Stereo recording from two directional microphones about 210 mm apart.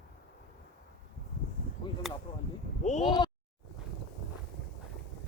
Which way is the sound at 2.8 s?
35° left (ahead or behind).